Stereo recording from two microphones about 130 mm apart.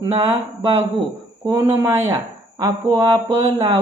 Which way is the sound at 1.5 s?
20° right (ahead or behind).